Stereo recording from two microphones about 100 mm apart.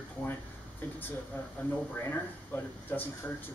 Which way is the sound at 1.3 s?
20° left (ahead or behind).